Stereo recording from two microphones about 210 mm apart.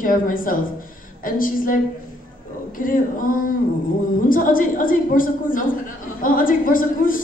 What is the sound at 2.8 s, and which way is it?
Speech, 40° left (ahead or behind).